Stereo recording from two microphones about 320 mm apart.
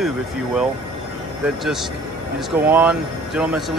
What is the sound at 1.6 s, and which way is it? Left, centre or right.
Speech, centre.